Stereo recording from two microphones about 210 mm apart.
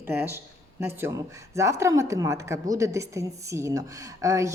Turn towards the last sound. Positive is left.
turn(degrees=-15)  # may be behind; listen again after turning